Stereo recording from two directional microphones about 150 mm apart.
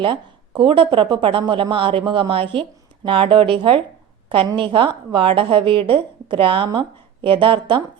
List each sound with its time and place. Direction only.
0.0 s a woman's voice: 35° right (ahead or behind)